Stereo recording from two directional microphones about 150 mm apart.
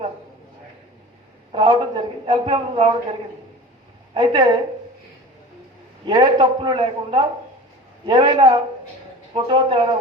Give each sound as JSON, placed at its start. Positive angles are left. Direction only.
{"t": 1.5, "sound": "a man's voice", "side_deg": -35}
{"t": 4.1, "sound": "a man's voice", "side_deg": -35}
{"t": 6.1, "sound": "a man's voice", "side_deg": -30}